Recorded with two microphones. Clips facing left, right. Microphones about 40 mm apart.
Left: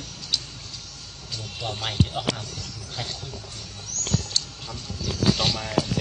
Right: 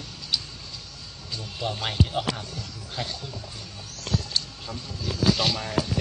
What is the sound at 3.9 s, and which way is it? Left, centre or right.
Horse, centre.